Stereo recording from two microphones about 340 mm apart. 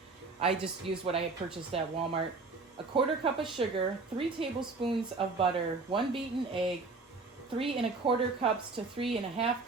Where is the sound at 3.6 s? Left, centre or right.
Centre.